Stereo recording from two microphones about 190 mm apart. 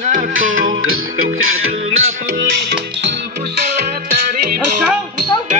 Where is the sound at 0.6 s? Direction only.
90° right.